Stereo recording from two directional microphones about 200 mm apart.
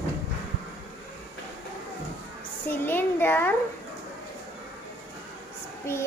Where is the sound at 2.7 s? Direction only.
10° left (ahead or behind).